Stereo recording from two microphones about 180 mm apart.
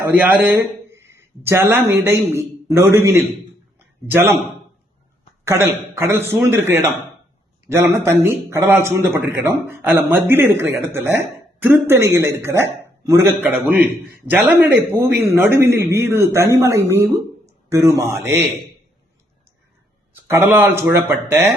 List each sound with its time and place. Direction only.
0.0 s a sound: 10° right (ahead or behind)
1.5 s a man's voice: 15° right (ahead or behind)
5.5 s a man's voice: 15° right (ahead or behind)
11.9 s a man's voice: 15° right (ahead or behind)
20.2 s a man's voice: 10° right (ahead or behind)